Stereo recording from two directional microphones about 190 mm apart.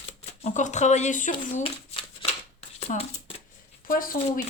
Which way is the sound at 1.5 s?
30° left (ahead or behind).